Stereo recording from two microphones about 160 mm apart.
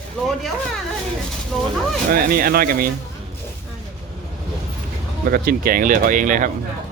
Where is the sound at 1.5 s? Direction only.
5° left (ahead or behind).